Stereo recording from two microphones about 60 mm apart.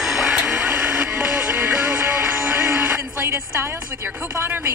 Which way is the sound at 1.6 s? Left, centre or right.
Right.